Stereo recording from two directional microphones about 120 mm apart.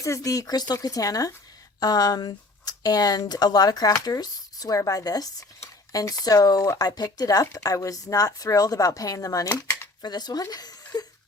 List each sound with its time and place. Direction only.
0.0 s speech: 25° left (ahead or behind)